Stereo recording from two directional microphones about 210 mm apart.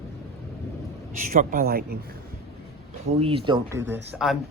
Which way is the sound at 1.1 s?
40° right (ahead or behind).